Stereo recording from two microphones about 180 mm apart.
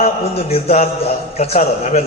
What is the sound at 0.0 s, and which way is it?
A man's voice, 35° left (ahead or behind).